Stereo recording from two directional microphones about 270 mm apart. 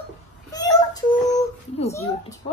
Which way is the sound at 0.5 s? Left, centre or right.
Centre.